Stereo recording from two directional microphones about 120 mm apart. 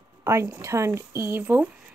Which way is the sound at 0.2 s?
20° right (ahead or behind).